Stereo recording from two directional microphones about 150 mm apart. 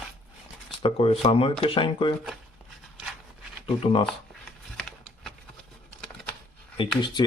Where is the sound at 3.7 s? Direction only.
35° left (ahead or behind).